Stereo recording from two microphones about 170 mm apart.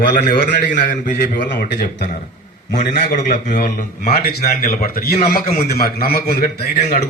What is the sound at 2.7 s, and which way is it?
A man's voice, 50° left (ahead or behind).